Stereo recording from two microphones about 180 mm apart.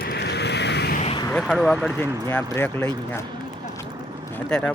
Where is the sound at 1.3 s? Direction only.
Centre (ahead or behind).